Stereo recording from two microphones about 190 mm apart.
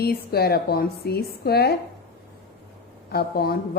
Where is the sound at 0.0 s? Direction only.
55° left (ahead or behind).